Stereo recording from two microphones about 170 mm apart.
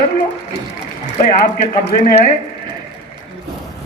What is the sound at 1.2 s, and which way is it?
Speech, 45° left (ahead or behind).